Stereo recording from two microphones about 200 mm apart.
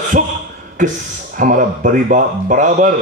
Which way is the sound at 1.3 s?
40° right (ahead or behind).